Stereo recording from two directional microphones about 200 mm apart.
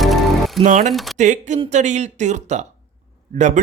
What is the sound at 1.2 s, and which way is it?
Speech, 35° right (ahead or behind).